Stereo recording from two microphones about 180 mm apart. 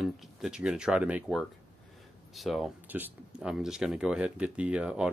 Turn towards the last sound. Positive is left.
turn(degrees=-5)  # may be behind; listen again after turning